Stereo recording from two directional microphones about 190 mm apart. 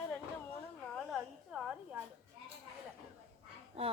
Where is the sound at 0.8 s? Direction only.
Centre (ahead or behind).